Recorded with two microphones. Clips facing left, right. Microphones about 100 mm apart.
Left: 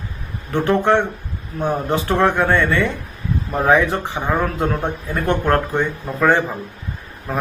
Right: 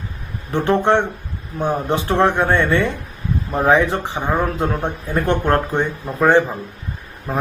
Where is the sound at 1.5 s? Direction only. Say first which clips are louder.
Even; 20° right (ahead or behind).